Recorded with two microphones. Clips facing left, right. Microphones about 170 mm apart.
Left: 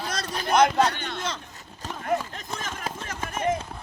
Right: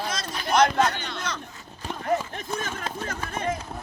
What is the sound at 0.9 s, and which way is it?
Speech, 55° left (ahead or behind).